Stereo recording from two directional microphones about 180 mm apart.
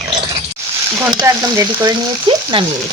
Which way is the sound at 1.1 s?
15° right (ahead or behind).